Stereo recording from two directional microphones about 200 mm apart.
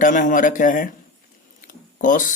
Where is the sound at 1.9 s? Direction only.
40° left (ahead or behind).